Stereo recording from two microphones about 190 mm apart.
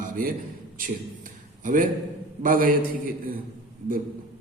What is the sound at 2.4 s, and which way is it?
Speech, 45° right (ahead or behind).